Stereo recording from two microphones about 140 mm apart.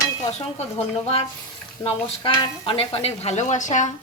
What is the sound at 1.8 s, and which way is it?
A woman's voice, 40° left (ahead or behind).